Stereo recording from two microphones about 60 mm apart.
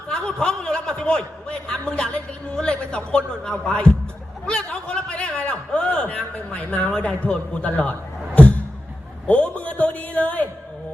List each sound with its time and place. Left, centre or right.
0.1 s a man's voice: centre
4.4 s a sound: centre
7.3 s a man's voice: left
9.2 s a man's voice: centre